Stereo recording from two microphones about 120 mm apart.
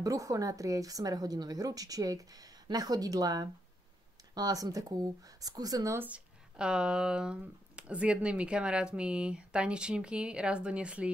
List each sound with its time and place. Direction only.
0.0 s a woman's voice: 30° right (ahead or behind)
5.9 s speech: 10° right (ahead or behind)